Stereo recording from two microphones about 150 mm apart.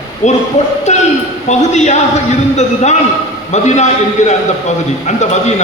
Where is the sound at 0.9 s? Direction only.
50° left (ahead or behind).